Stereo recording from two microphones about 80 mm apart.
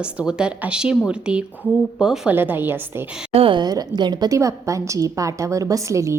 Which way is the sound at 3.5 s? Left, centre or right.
Right.